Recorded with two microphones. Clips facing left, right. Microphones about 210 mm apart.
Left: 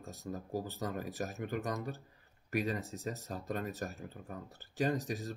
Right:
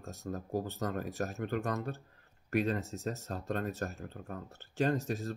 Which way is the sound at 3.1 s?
15° left (ahead or behind).